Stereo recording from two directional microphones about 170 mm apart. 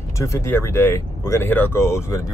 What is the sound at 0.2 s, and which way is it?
Speech, 15° left (ahead or behind).